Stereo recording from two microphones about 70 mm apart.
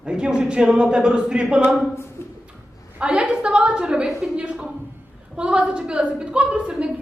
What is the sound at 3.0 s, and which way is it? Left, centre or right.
A woman's voice, centre.